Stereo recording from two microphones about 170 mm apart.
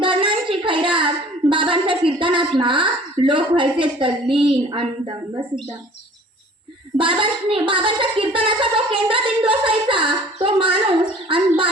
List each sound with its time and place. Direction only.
0.0 s a sound: 30° right (ahead or behind)
2.6 s a woman's voice: 30° right (ahead or behind)
6.9 s speech: 30° right (ahead or behind)